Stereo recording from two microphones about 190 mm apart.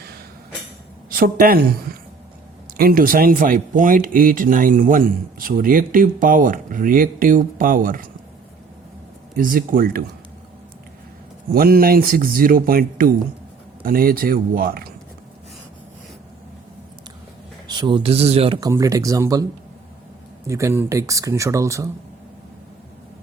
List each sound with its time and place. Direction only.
1.1 s speech: 50° right (ahead or behind)
9.3 s speech: 45° right (ahead or behind)
11.5 s speech: 50° right (ahead or behind)
17.7 s speech: 25° right (ahead or behind)
18.7 s speech: 15° right (ahead or behind)
20.5 s speech: 15° right (ahead or behind)